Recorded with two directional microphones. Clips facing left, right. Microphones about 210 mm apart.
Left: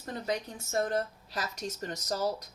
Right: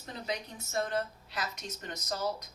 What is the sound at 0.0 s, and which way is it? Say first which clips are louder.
A woman's voice: left 4 dB; 50° left (ahead or behind).